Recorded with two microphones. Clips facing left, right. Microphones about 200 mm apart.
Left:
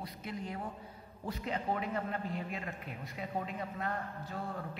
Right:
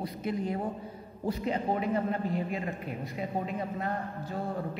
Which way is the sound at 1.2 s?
35° right (ahead or behind).